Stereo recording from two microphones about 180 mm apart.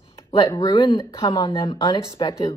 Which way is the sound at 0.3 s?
20° left (ahead or behind).